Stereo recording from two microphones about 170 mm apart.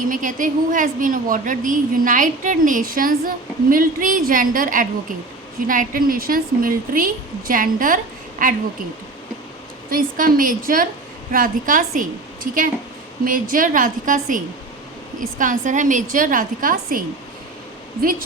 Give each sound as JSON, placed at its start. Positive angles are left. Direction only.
{"t": 0.1, "sound": "a woman's voice", "side_deg": -50}
{"t": 9.9, "sound": "a woman's voice", "side_deg": -55}